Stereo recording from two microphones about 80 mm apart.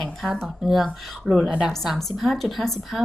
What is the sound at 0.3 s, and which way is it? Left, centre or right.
A woman's voice, centre.